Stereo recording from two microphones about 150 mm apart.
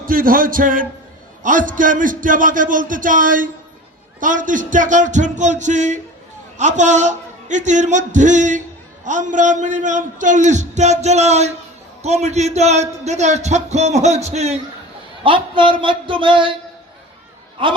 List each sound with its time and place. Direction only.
0.0 s music: 70° right (ahead or behind)
1.5 s a man's voice: 60° right (ahead or behind)
15.2 s a man's voice: 35° right (ahead or behind)
17.6 s a man's voice: 35° right (ahead or behind)